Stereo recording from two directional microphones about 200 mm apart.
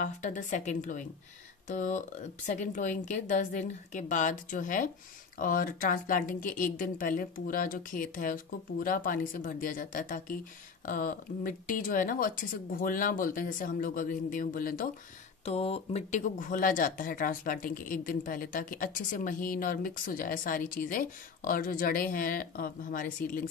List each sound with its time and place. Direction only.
0.0 s speech: 40° left (ahead or behind)
15.4 s speech: 30° left (ahead or behind)